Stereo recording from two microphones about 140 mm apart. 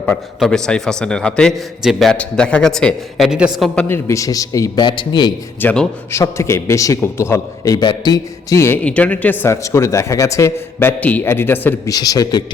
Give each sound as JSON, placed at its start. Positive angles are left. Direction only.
{"t": 0.0, "sound": "a man's voice", "side_deg": 5}
{"t": 3.8, "sound": "a man's voice", "side_deg": 15}
{"t": 5.5, "sound": "a man's voice", "side_deg": 10}
{"t": 6.1, "sound": "a man's voice", "side_deg": 20}
{"t": 11.9, "sound": "a man's voice", "side_deg": 25}